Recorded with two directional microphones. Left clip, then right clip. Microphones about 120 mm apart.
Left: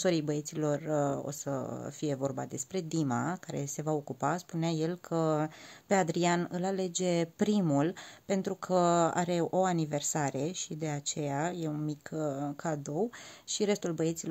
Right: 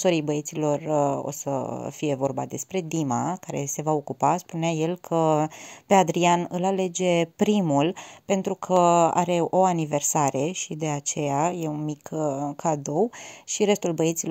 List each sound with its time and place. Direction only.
0.0 s speech: 15° right (ahead or behind)